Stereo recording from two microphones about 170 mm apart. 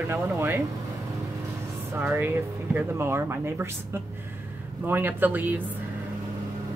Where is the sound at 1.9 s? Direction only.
10° right (ahead or behind).